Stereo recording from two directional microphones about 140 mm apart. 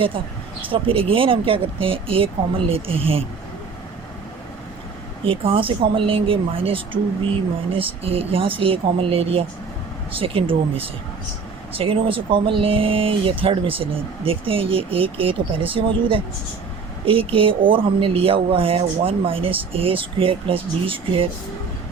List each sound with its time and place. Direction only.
0.7 s speech: 40° right (ahead or behind)
5.2 s speech: 40° right (ahead or behind)
11.7 s speech: 40° right (ahead or behind)